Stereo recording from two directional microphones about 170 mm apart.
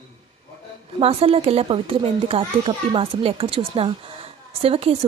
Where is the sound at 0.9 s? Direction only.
35° right (ahead or behind).